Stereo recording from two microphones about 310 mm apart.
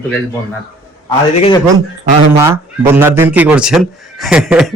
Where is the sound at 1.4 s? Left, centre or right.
Centre.